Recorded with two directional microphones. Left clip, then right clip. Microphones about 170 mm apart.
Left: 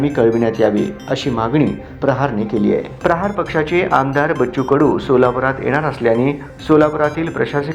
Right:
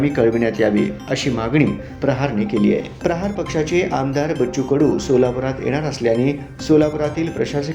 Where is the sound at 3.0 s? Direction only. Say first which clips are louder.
Left 5 dB; 15° right (ahead or behind).